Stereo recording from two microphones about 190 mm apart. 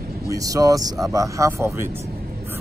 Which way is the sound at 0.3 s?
20° right (ahead or behind).